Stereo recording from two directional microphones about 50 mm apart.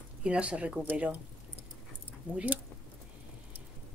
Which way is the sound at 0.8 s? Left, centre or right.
Right.